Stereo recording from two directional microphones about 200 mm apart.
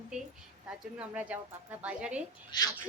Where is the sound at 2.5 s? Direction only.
20° left (ahead or behind).